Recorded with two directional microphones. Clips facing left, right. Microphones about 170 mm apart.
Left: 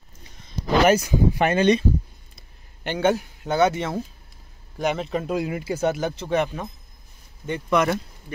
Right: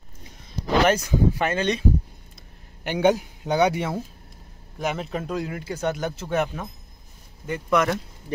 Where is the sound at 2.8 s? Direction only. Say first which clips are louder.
Right 1 dB; 10° right (ahead or behind).